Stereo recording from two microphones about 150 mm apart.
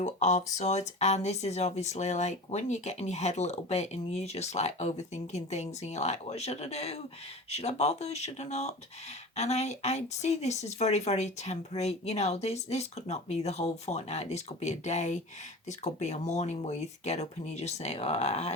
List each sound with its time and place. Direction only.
0.0 s speech: 50° left (ahead or behind)